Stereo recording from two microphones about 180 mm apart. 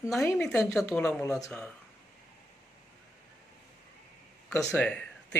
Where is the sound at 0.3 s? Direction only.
10° left (ahead or behind).